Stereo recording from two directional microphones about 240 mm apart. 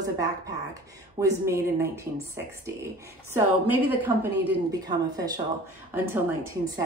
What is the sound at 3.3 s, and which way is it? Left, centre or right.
A woman's voice, centre.